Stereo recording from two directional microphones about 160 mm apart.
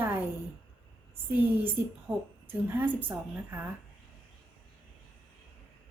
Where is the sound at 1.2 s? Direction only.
15° right (ahead or behind).